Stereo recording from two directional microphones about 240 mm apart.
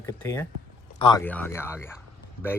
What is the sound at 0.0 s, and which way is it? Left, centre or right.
Speech, centre.